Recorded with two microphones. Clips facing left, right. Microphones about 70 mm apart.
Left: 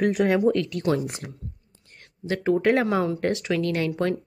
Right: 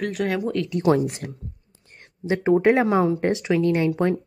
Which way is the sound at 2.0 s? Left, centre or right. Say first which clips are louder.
Right 4 dB; centre.